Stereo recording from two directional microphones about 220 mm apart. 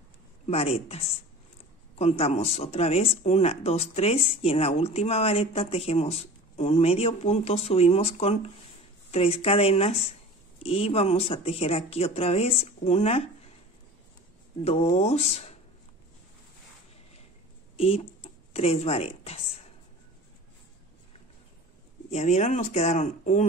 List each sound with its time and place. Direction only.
0.5 s speech: 25° left (ahead or behind)
14.6 s speech: 30° left (ahead or behind)
17.7 s speech: 25° left (ahead or behind)
22.1 s speech: 30° left (ahead or behind)